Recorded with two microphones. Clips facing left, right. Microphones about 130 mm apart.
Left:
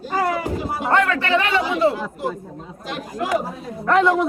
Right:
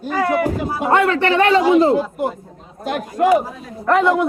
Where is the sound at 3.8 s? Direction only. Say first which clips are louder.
Right 2 dB; centre (ahead or behind).